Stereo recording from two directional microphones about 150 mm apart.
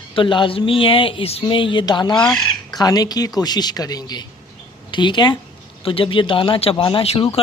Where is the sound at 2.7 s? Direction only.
25° left (ahead or behind).